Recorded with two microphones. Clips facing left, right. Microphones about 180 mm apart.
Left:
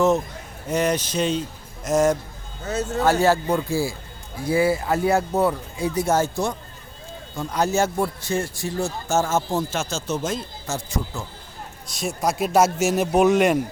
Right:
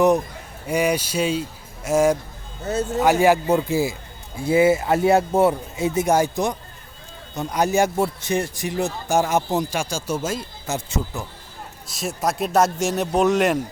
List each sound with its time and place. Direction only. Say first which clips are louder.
0.7 s a man's voice: right 1 dB; 10° right (ahead or behind)
10.8 s speech: right 1 dB; 20° right (ahead or behind)
11.9 s a man's voice: even; centre (ahead or behind)